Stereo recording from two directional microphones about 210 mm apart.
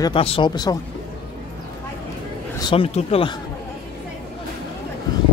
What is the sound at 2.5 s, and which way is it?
Speech, 25° left (ahead or behind).